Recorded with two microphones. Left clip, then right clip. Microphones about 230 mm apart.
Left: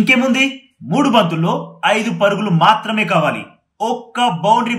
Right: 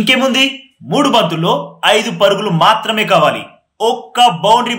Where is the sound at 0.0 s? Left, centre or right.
Centre.